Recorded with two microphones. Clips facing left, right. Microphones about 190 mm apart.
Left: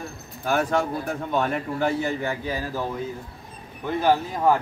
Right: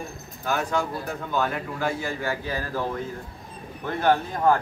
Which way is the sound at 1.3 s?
25° left (ahead or behind).